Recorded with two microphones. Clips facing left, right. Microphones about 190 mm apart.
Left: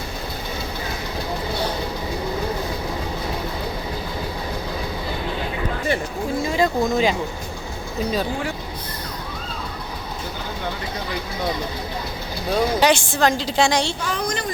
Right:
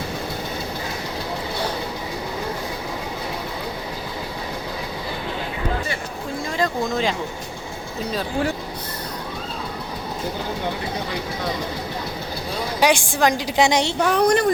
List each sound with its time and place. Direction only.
6.4 s a sound: 5° left (ahead or behind)
12.8 s a woman's voice: 15° right (ahead or behind)
14.0 s a woman's voice: 65° right (ahead or behind)